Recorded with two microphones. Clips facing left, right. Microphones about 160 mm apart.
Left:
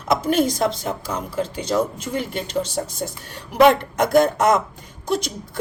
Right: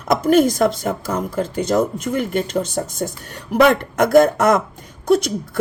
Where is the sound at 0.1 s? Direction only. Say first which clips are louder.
Right 5 dB; 50° right (ahead or behind).